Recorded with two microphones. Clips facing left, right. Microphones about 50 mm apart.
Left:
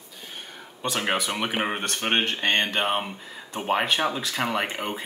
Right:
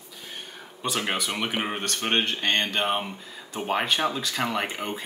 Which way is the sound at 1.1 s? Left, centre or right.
Centre.